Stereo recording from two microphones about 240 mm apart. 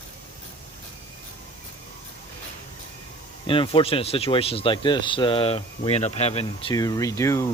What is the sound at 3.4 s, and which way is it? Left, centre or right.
Speech, left.